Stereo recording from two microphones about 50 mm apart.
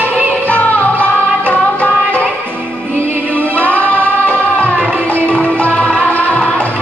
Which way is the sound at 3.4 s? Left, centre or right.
Right.